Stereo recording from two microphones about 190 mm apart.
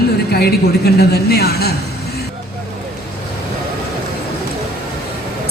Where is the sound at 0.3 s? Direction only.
55° left (ahead or behind).